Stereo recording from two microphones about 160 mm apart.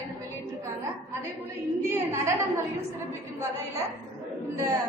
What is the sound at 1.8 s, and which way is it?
Speech, 15° right (ahead or behind).